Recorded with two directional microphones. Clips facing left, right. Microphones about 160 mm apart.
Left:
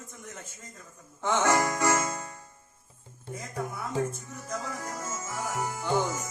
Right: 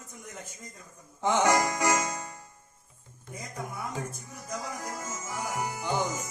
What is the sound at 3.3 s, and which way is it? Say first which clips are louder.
Speech: left 4 dB; 30° left (ahead or behind).